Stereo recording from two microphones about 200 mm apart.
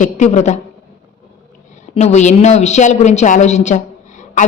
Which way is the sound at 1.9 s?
35° left (ahead or behind).